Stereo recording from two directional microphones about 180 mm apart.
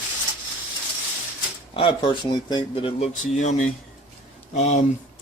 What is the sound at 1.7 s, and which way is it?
Speech, 25° left (ahead or behind).